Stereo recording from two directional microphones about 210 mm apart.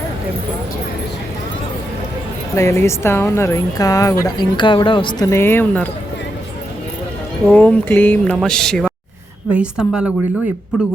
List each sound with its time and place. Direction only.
2.6 s speech: 15° left (ahead or behind)
7.4 s a woman's voice: 5° left (ahead or behind)